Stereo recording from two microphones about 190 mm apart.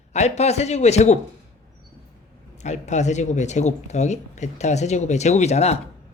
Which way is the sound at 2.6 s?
40° left (ahead or behind).